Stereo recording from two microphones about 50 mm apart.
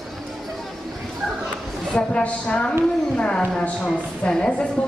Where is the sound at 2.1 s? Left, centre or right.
Left.